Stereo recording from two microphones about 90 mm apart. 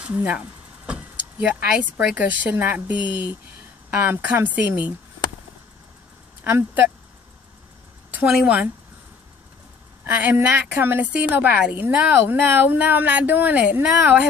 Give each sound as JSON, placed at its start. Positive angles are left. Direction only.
{"t": 0.0, "sound": "vehicle", "side_deg": -15}
{"t": 2.1, "sound": "speech", "side_deg": -20}
{"t": 3.0, "sound": "speech", "side_deg": 60}
{"t": 3.9, "sound": "speech", "side_deg": -15}
{"t": 6.4, "sound": "a woman's voice", "side_deg": -20}
{"t": 8.1, "sound": "a sound", "side_deg": -20}
{"t": 8.4, "sound": "speech", "side_deg": -15}
{"t": 10.0, "sound": "a woman's voice", "side_deg": -20}